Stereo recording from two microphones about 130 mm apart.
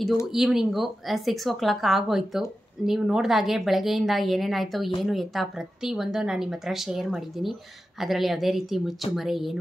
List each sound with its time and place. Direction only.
0.3 s a woman's voice: centre (ahead or behind)